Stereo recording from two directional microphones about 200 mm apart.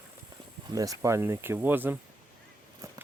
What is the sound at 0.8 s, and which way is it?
Speech, 15° right (ahead or behind).